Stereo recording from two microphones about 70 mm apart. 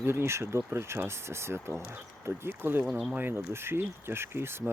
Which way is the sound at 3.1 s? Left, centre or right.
Right.